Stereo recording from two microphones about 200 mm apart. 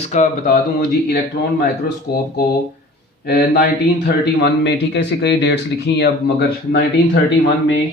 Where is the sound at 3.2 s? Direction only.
55° left (ahead or behind).